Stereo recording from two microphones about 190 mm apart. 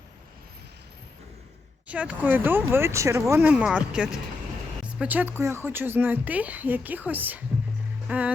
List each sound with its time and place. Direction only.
1.9 s a woman's voice: 5° right (ahead or behind)